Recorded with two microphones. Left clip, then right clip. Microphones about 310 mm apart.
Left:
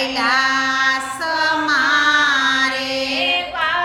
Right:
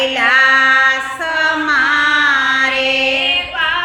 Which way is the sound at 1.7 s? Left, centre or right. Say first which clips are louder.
Right 2 dB; centre.